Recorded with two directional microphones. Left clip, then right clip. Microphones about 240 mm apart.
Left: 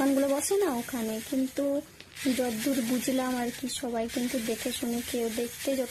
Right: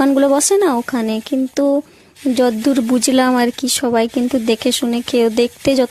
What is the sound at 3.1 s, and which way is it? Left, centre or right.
Speech, right.